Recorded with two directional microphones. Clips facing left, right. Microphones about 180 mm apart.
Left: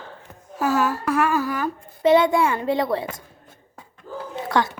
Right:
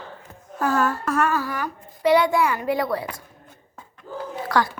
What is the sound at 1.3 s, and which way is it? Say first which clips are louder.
A woman's voice: left 3 dB; 20° left (ahead or behind).